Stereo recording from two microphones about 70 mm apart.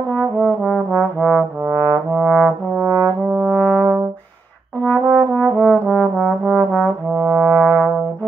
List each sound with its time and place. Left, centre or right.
0.1 s trombone: left
2.7 s trombone: right
3.3 s brass instrument: centre
4.8 s trombone: centre